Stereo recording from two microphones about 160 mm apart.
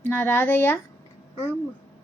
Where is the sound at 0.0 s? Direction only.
10° left (ahead or behind).